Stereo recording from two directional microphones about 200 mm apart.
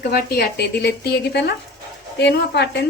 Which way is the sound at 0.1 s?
50° left (ahead or behind).